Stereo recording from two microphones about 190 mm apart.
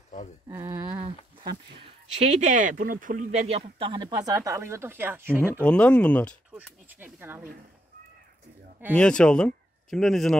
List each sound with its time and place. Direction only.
0.5 s speech: 15° right (ahead or behind)
1.0 s a sound: 20° right (ahead or behind)
2.4 s speech: 40° right (ahead or behind); by 5.6 s 10° right (ahead or behind)
5.6 s speech: 5° left (ahead or behind)
6.5 s speech: 10° right (ahead or behind)
8.9 s speech: 5° left (ahead or behind)